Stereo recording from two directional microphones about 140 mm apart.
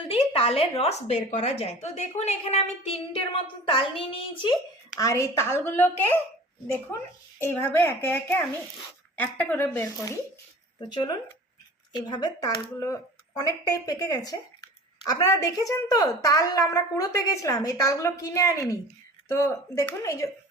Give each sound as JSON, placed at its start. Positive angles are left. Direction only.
{"t": 0.1, "sound": "a woman's voice", "side_deg": 45}
{"t": 4.9, "sound": "a woman's voice", "side_deg": 20}
{"t": 7.3, "sound": "a woman's voice", "side_deg": 15}
{"t": 10.8, "sound": "a woman's voice", "side_deg": 30}